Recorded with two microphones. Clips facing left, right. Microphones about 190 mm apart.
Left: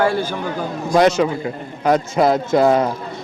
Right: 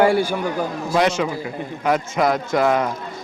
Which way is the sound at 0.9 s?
40° left (ahead or behind).